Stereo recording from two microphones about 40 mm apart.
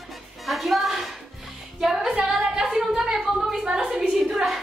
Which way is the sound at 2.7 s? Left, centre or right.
Centre.